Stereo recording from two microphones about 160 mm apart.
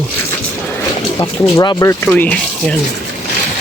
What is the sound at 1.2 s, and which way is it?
Speech, 20° left (ahead or behind).